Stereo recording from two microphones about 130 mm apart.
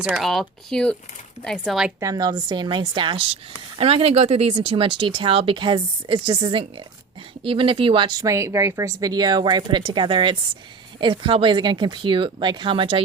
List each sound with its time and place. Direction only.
0.0 s speech: 5° right (ahead or behind)
2.0 s speech: 25° right (ahead or behind)